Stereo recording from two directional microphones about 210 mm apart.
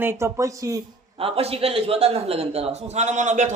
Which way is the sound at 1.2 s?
30° right (ahead or behind).